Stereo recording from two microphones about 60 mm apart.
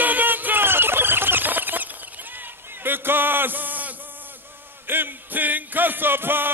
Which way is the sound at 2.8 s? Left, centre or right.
Right.